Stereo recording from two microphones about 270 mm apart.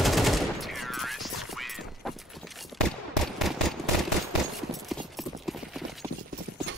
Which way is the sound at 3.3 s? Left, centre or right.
Centre.